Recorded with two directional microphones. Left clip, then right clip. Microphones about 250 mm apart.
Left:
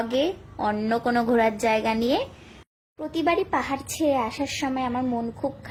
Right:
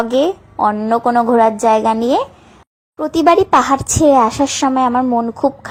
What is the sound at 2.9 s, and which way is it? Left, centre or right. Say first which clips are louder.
A woman's voice: right 13 dB; right.